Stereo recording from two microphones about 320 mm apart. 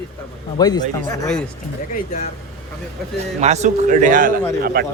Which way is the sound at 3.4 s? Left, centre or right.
Right.